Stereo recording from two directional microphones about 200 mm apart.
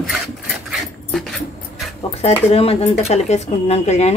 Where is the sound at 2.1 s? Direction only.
30° left (ahead or behind).